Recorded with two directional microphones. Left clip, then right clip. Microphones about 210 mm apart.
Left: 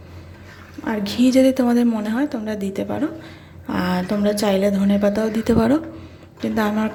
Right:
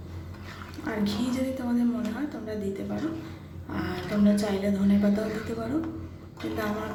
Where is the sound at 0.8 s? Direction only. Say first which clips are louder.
Left 10 dB; 40° left (ahead or behind).